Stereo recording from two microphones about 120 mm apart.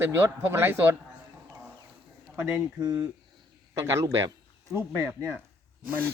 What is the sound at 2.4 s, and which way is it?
Speech, 15° right (ahead or behind).